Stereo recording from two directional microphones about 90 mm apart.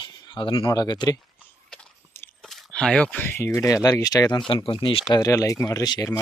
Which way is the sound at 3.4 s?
30° left (ahead or behind).